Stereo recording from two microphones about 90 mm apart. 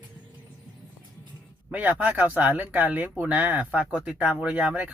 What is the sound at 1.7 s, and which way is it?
Speech, 15° right (ahead or behind).